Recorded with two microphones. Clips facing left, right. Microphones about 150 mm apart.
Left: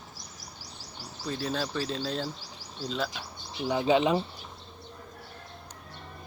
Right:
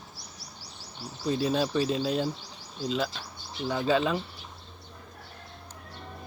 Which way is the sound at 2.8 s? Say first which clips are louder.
Right 3 dB; centre (ahead or behind).